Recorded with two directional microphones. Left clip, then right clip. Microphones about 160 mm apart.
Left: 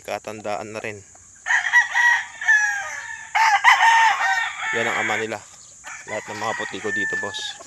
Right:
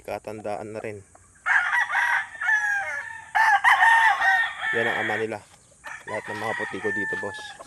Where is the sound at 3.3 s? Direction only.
90° right; by 4.9 s 60° right (ahead or behind).